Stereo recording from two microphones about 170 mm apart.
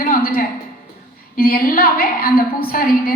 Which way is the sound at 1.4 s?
60° left (ahead or behind).